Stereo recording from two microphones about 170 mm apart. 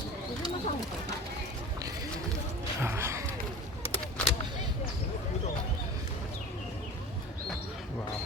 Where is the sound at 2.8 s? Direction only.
15° right (ahead or behind).